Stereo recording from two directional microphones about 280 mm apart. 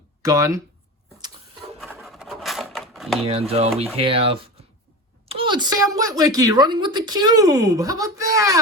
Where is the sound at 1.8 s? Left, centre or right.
Centre.